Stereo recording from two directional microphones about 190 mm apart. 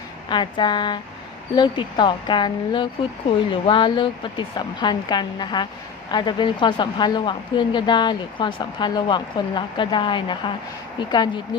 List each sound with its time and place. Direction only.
0.3 s a woman's voice: 25° left (ahead or behind)